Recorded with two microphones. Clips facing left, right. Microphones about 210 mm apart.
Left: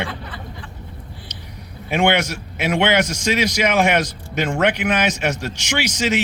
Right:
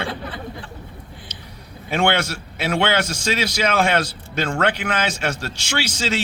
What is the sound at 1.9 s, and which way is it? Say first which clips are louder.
A man's voice: left 2 dB; 15° left (ahead or behind).